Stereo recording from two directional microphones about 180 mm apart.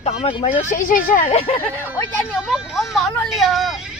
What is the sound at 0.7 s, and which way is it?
Speech, 45° left (ahead or behind).